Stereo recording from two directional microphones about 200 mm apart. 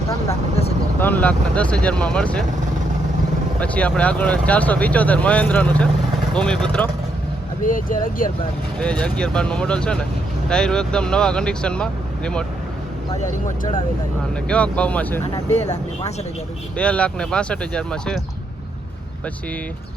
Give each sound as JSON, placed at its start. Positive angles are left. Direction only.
{"t": 0.9, "sound": "speech", "side_deg": 10}
{"t": 3.6, "sound": "speech", "side_deg": 5}
{"t": 7.6, "sound": "speech", "side_deg": 45}
{"t": 8.8, "sound": "speech", "side_deg": 5}
{"t": 14.4, "sound": "speech", "side_deg": 5}
{"t": 15.2, "sound": "speech", "side_deg": 30}
{"t": 16.7, "sound": "speech", "side_deg": 5}